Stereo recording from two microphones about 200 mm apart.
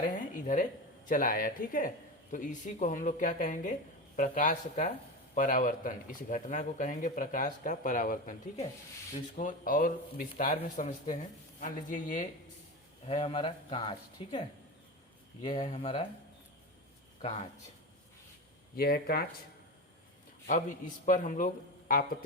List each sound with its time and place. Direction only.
0.0 s speech: 40° left (ahead or behind)
13.1 s speech: 30° left (ahead or behind)
17.2 s speech: 35° left (ahead or behind)
18.8 s speech: 50° left (ahead or behind)
20.5 s speech: 40° left (ahead or behind)